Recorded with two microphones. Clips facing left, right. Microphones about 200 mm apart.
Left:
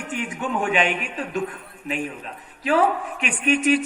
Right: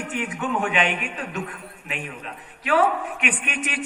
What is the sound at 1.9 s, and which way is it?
A man's voice, 35° left (ahead or behind).